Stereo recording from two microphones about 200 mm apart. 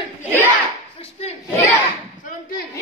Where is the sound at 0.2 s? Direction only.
10° right (ahead or behind).